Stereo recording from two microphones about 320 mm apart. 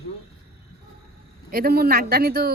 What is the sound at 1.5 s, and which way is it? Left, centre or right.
Speech, right.